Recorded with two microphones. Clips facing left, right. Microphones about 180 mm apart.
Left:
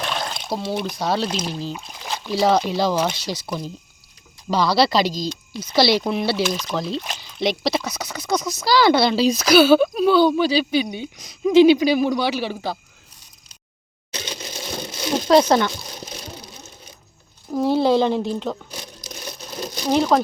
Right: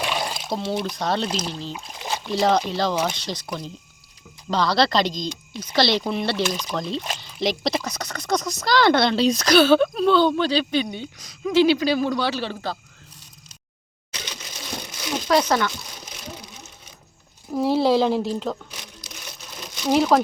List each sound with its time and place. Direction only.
0.0 s a sound: 10° right (ahead or behind)
0.9 s speech: 5° left (ahead or behind)
14.1 s a sound: 30° left (ahead or behind)
17.5 s speech: centre (ahead or behind)
18.7 s sewing machine: 35° left (ahead or behind)
19.9 s speech: 5° right (ahead or behind)